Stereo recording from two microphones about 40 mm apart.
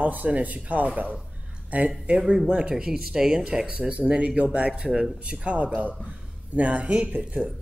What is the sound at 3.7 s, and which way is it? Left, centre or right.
Speech, right.